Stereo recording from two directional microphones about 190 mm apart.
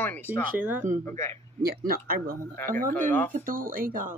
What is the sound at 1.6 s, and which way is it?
Speech, 55° right (ahead or behind).